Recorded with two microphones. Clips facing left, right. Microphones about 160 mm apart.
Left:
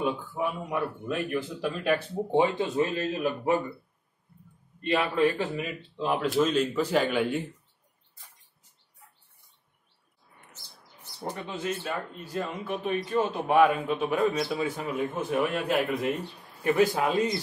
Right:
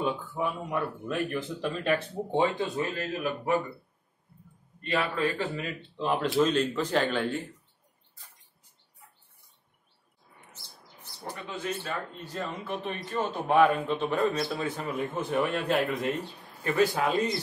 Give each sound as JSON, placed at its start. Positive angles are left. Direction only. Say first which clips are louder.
{"t": 0.0, "sound": "speech", "louder": "left 1 dB", "side_deg": 10}
{"t": 2.3, "sound": "speech", "louder": "left 3 dB", "side_deg": 20}
{"t": 4.8, "sound": "a man's voice", "louder": "left 4 dB", "side_deg": 20}
{"t": 5.9, "sound": "a man's voice", "louder": "even", "side_deg": 5}
{"t": 11.8, "sound": "a man's voice", "louder": "left 2 dB", "side_deg": 5}